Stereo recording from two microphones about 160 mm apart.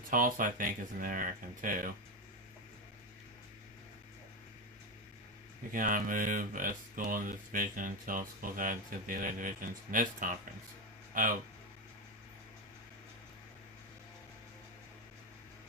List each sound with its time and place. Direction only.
0.1 s speech: 60° right (ahead or behind)
5.7 s speech: 60° right (ahead or behind)